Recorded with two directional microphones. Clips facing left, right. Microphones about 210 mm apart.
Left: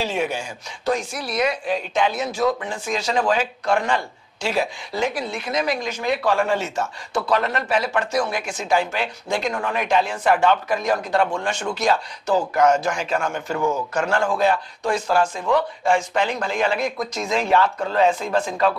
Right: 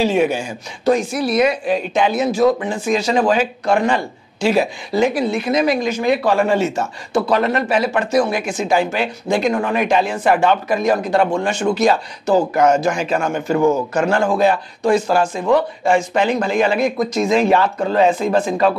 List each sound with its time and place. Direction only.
0.0 s speech: 10° right (ahead or behind)
13.6 s a man's voice: 40° right (ahead or behind)
14.0 s speech: 15° right (ahead or behind)